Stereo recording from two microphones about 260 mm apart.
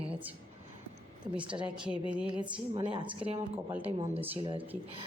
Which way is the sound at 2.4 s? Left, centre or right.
Centre.